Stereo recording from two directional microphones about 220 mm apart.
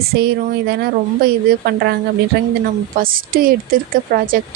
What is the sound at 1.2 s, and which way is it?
A woman's voice, 45° right (ahead or behind).